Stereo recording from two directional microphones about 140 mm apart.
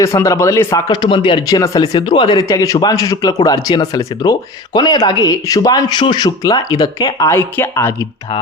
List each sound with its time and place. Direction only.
0.0 s speech: 20° left (ahead or behind)
0.9 s speech: 35° left (ahead or behind)
1.5 s speech: 25° left (ahead or behind)
2.4 s speech: 25° left (ahead or behind)